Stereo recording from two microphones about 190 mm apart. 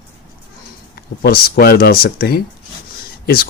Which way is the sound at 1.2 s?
55° left (ahead or behind).